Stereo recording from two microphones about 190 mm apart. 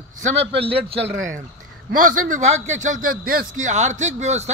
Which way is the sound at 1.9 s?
45° right (ahead or behind).